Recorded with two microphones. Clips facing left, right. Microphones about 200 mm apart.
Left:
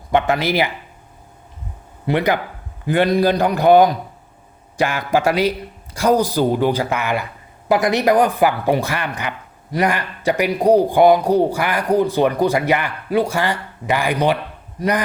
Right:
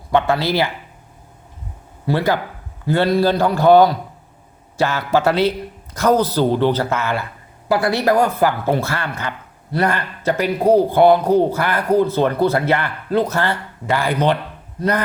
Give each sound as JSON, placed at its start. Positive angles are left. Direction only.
{"t": 0.1, "sound": "speech", "side_deg": 15}
{"t": 2.0, "sound": "speech", "side_deg": 20}